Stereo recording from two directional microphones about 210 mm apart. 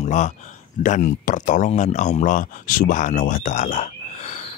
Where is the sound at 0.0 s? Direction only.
35° left (ahead or behind).